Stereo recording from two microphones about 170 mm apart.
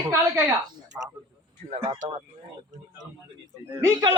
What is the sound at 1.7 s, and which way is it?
Speech, 30° right (ahead or behind).